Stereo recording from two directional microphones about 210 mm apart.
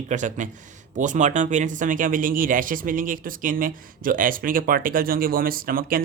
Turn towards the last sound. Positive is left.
turn(degrees=-45)  # may be behind; listen again after turning